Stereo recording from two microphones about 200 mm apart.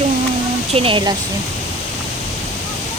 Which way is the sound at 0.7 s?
25° right (ahead or behind).